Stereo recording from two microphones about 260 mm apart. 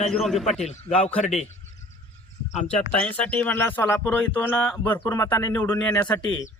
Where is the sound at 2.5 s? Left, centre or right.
Left.